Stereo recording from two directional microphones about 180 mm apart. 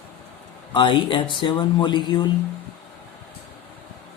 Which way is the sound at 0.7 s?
25° left (ahead or behind).